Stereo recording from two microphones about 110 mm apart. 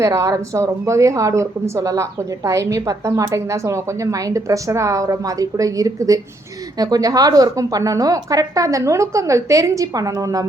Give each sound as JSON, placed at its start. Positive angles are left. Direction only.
{"t": 0.0, "sound": "a woman's voice", "side_deg": -30}